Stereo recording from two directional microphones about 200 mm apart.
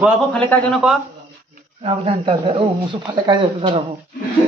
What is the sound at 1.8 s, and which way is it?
Speech, 25° right (ahead or behind).